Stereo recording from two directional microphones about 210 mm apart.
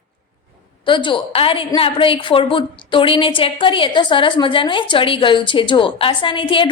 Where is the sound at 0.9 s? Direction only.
25° left (ahead or behind).